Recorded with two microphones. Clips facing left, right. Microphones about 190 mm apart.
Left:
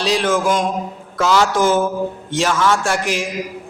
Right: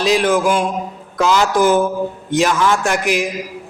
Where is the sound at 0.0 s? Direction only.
15° right (ahead or behind).